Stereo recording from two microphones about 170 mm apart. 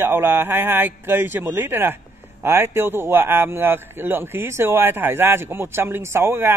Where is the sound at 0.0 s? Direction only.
15° right (ahead or behind).